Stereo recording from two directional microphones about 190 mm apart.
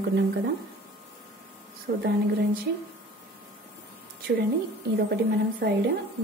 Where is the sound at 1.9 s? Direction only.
55° right (ahead or behind).